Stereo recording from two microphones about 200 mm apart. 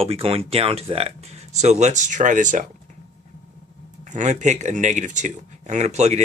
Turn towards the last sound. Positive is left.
turn(degrees=-35)  # may be behind; listen again after turning